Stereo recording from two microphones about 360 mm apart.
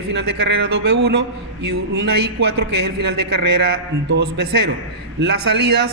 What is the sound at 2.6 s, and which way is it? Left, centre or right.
A man's voice, right.